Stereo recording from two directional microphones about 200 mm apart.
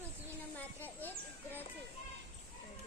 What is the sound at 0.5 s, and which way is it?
A child's voice, 10° left (ahead or behind).